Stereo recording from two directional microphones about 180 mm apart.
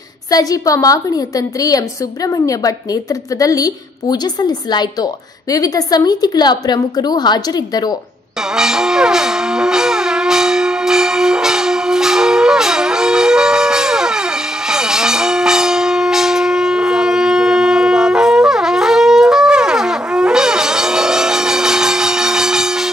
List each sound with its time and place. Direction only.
0.3 s a woman's voice: 20° left (ahead or behind)
8.4 s shofar: 5° right (ahead or behind)